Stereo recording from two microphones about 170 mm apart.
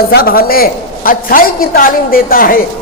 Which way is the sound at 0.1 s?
60° left (ahead or behind).